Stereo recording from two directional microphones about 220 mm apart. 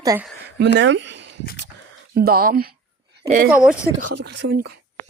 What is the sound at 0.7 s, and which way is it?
Speech, 55° right (ahead or behind).